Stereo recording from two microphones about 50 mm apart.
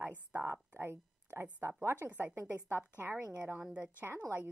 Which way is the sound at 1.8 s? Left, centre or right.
Right.